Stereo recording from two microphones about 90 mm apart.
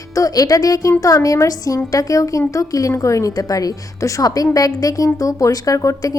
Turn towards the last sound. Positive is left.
turn(degrees=40)  # may be behind; listen again after turning